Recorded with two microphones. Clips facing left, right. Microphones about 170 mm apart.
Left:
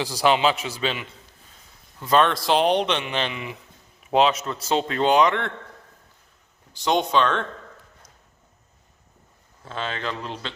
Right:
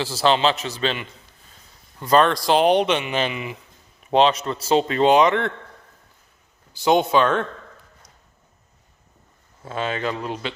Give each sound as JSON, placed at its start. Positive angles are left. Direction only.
{"t": 0.0, "sound": "a man's voice", "side_deg": 15}
{"t": 6.7, "sound": "speech", "side_deg": -5}
{"t": 9.6, "sound": "speech", "side_deg": -10}